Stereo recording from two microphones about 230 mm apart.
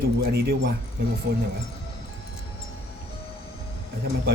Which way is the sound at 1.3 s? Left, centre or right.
Right.